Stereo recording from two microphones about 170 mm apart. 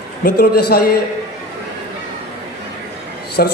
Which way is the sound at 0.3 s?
65° left (ahead or behind).